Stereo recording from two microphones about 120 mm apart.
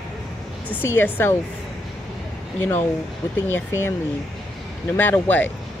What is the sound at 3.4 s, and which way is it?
Speech, 20° left (ahead or behind).